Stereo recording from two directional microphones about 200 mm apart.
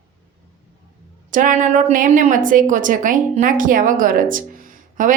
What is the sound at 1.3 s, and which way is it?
A woman's voice, 40° right (ahead or behind).